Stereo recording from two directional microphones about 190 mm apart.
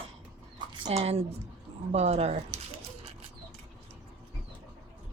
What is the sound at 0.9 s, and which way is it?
Speech, 35° right (ahead or behind).